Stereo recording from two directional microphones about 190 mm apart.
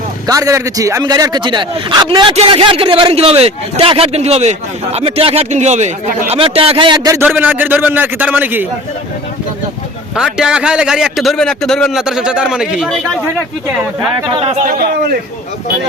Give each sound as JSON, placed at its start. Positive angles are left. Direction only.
{"t": 0.3, "sound": "a man's voice", "side_deg": -15}
{"t": 10.2, "sound": "a man's voice", "side_deg": -5}
{"t": 14.3, "sound": "speech", "side_deg": -35}
{"t": 14.7, "sound": "a man's voice", "side_deg": -55}